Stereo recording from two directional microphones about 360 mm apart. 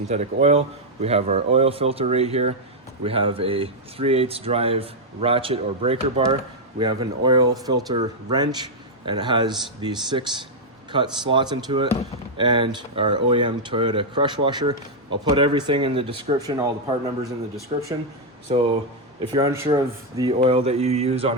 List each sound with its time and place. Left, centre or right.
0.1 s speech: centre
18.5 s speech: centre